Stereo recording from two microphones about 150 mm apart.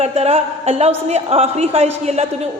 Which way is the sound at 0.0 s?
45° right (ahead or behind).